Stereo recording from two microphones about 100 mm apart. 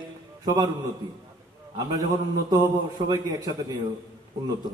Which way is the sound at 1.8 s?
40° right (ahead or behind).